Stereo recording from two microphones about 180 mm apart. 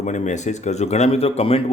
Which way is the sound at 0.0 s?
40° left (ahead or behind).